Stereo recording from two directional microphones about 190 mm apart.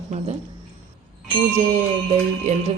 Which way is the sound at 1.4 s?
40° right (ahead or behind).